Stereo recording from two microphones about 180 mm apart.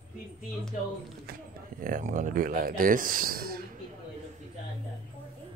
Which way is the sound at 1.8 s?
50° right (ahead or behind).